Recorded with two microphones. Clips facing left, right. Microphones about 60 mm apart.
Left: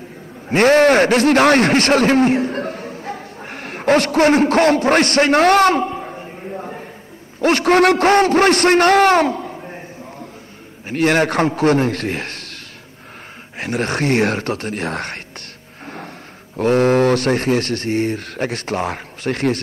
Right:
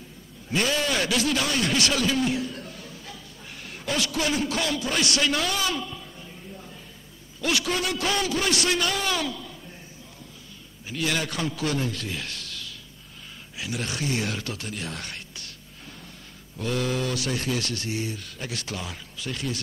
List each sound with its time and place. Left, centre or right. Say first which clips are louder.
0.5 s a man's voice: left 14 dB; left
15.8 s a sound: left 14 dB; left
16.5 s speech: left 13 dB; left